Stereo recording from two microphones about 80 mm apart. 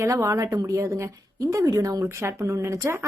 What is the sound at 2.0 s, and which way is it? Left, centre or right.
A woman's voice, right.